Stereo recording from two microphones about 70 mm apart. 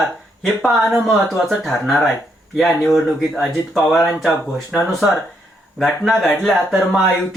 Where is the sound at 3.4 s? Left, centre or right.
Centre.